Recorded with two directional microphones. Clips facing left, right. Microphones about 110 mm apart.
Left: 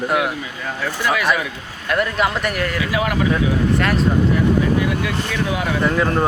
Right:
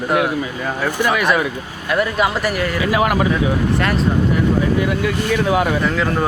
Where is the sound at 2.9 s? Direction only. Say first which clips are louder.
Right 5 dB; 55° right (ahead or behind).